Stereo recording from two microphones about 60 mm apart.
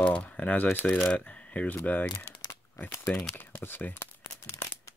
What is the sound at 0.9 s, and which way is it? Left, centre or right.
Speech, centre.